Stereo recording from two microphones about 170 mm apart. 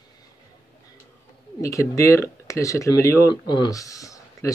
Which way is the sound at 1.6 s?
20° left (ahead or behind).